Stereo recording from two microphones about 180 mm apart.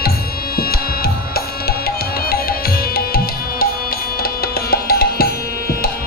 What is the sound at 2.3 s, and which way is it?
Music, 55° left (ahead or behind).